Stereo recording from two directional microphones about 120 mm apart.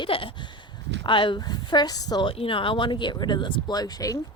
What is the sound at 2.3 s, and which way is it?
Speech, 45° left (ahead or behind).